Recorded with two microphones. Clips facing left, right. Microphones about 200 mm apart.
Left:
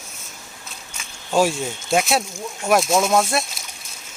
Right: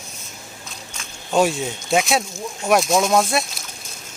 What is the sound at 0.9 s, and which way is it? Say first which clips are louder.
Speech: even; centre (ahead or behind).